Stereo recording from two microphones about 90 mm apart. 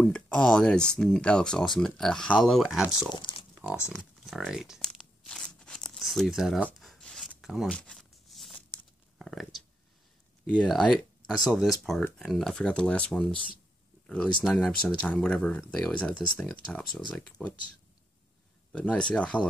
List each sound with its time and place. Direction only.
0.0 s speech: 10° left (ahead or behind)
3.1 s speech: 65° left (ahead or behind)
4.2 s crumpling: 5° left (ahead or behind)
4.5 s speech: 5° right (ahead or behind)
4.8 s tearing: 5° left (ahead or behind)
6.8 s a sound: 5° left (ahead or behind)
7.7 s a sound: 10° left (ahead or behind)
9.2 s speech: centre (ahead or behind)
18.7 s speech: 10° left (ahead or behind)